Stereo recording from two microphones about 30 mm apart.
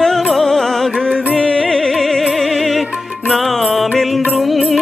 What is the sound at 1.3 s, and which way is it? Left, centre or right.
Music, left.